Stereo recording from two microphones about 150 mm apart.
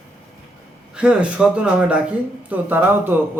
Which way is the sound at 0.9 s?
5° right (ahead or behind).